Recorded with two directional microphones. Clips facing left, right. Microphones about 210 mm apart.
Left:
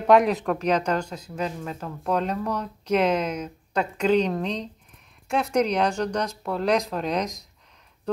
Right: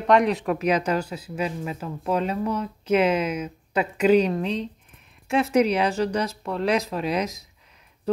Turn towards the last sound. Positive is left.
turn(degrees=-5)  # may be behind; listen again after turning